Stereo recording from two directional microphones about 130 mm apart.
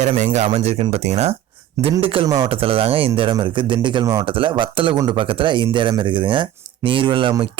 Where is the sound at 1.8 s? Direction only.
45° right (ahead or behind).